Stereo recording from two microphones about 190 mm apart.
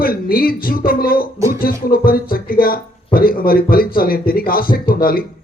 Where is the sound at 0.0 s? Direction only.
50° left (ahead or behind).